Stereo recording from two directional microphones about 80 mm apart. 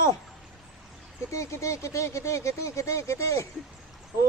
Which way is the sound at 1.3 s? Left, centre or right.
Left.